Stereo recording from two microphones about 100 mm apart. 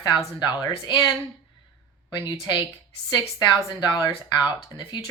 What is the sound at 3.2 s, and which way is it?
Speech, 45° left (ahead or behind).